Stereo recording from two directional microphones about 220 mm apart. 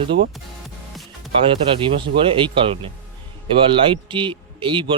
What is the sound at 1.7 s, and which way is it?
A man's voice, 25° right (ahead or behind).